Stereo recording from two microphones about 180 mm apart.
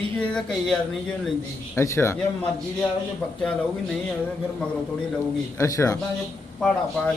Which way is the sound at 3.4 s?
Centre (ahead or behind).